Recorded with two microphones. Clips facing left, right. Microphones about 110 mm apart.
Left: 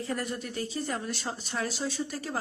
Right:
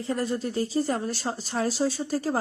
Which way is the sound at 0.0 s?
30° right (ahead or behind).